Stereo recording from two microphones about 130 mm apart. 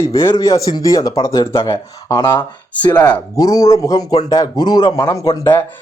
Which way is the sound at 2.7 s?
10° left (ahead or behind).